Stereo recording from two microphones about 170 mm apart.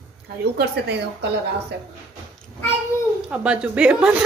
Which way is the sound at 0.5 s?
80° right.